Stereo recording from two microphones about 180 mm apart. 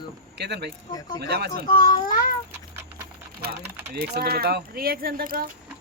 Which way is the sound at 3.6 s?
10° right (ahead or behind).